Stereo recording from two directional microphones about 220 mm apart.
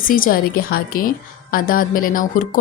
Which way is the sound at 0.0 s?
40° left (ahead or behind).